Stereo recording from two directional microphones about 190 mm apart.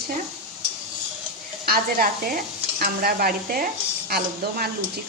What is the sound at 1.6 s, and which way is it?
Speech, 50° right (ahead or behind).